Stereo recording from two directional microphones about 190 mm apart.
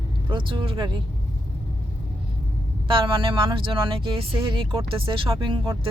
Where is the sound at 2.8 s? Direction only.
25° right (ahead or behind).